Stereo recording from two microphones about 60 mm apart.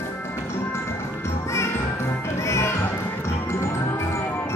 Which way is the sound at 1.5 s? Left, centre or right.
Left.